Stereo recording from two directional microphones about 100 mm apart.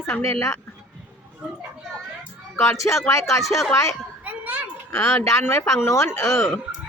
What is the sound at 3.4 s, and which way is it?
Speech, centre (ahead or behind).